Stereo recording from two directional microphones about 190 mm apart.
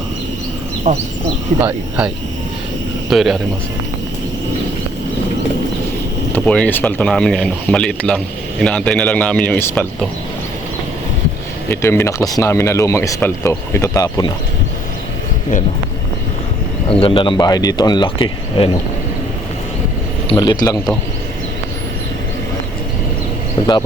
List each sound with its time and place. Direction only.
0.9 s speech: 40° right (ahead or behind)
1.5 s speech: 10° right (ahead or behind)
6.3 s speech: 5° left (ahead or behind)
11.7 s speech: 10° left (ahead or behind)
16.9 s speech: 30° left (ahead or behind)
20.3 s speech: 20° left (ahead or behind)
23.6 s speech: 25° left (ahead or behind)